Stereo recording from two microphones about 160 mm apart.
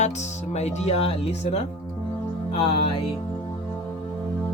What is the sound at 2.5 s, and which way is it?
Music, 35° left (ahead or behind).